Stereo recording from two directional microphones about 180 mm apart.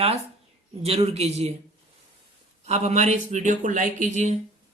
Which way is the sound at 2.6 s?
40° right (ahead or behind).